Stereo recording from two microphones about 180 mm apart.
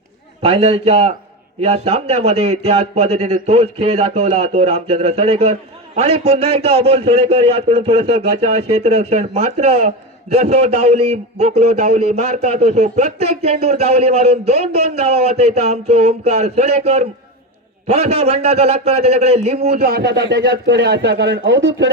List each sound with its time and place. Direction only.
0.4 s a man's voice: 35° right (ahead or behind)
19.8 s a man's voice: 60° right (ahead or behind)